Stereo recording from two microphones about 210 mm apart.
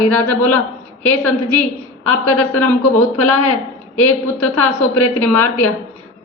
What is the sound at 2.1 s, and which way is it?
A woman's voice, 90° left.